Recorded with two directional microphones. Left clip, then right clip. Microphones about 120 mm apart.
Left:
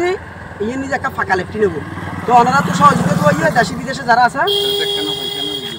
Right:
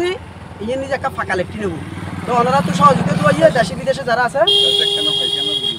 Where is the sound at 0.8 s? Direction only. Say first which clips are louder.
Left 5 dB; 40° right (ahead or behind).